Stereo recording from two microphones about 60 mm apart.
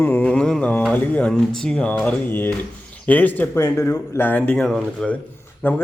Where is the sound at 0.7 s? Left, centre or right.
Left.